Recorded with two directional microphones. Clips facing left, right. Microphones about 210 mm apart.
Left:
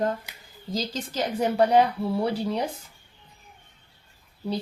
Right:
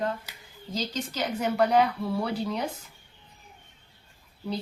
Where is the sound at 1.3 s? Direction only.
30° left (ahead or behind).